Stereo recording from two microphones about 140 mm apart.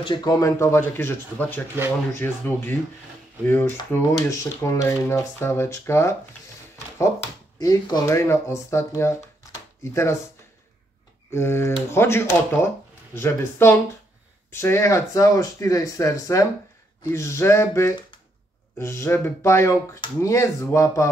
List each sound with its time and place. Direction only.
0.0 s speech: 30° left (ahead or behind)
7.5 s speech: 25° left (ahead or behind)
11.3 s speech: 15° left (ahead or behind)